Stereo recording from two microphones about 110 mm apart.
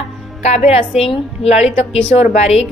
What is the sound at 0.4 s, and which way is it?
A woman's voice, 90° left.